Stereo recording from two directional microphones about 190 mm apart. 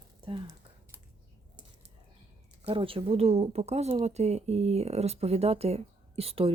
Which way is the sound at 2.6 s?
30° right (ahead or behind).